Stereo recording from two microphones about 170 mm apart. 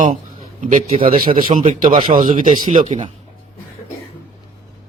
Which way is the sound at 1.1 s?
55° right (ahead or behind).